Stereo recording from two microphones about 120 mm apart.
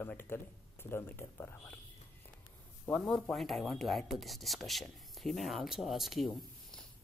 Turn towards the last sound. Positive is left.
turn(degrees=0)  # may be behind; listen again after turning